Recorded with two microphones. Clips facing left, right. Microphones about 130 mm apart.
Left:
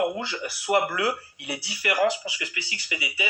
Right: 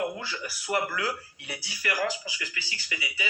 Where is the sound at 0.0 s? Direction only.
25° left (ahead or behind).